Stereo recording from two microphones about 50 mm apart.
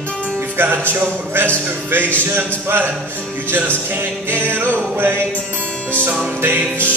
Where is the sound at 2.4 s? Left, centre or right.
Right.